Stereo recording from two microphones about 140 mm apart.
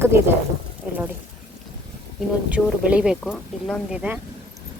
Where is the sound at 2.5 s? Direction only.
5° right (ahead or behind).